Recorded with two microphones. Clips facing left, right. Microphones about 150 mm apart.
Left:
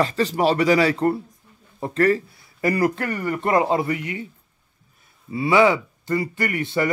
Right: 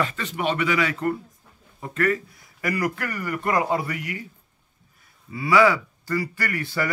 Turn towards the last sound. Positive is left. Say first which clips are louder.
# left 5 dB
turn(degrees=25)  # may be behind; listen again after turning